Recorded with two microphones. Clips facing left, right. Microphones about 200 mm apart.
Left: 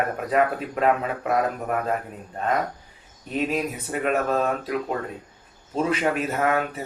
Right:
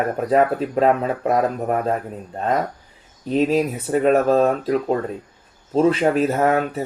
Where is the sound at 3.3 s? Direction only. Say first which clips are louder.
Right 7 dB; 30° right (ahead or behind).